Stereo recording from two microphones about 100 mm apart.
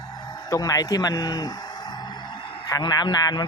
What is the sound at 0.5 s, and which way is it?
A man's voice, 35° left (ahead or behind).